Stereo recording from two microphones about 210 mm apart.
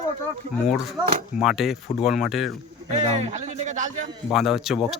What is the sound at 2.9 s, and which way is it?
Speech, 35° right (ahead or behind).